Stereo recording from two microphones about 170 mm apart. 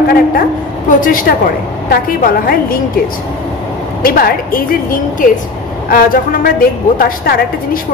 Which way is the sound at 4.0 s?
60° left (ahead or behind).